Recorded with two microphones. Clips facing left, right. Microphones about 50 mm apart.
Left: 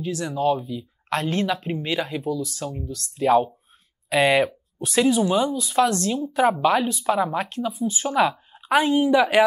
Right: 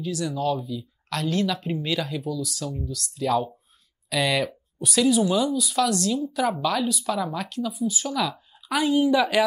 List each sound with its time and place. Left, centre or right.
0.0 s speech: left